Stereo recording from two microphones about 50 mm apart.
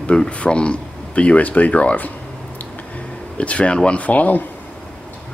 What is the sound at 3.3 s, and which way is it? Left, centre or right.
Speech, left.